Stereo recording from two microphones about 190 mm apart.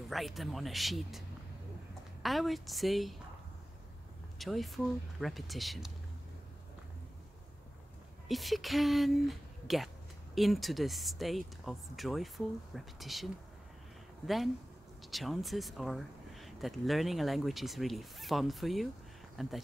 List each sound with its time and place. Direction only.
0.1 s speech: centre (ahead or behind)
2.2 s speech: centre (ahead or behind)
4.4 s speech: centre (ahead or behind)
8.3 s speech: centre (ahead or behind)